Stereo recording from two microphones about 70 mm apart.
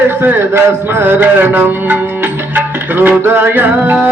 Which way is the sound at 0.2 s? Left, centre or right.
Right.